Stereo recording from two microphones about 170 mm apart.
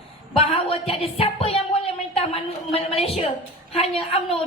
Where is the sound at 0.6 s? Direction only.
35° left (ahead or behind).